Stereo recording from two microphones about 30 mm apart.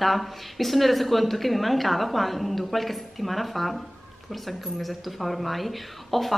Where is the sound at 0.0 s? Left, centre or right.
Centre.